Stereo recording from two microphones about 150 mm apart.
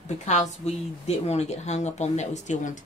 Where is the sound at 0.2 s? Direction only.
50° left (ahead or behind).